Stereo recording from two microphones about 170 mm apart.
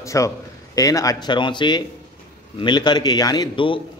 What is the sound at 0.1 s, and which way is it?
A man's voice, 20° left (ahead or behind).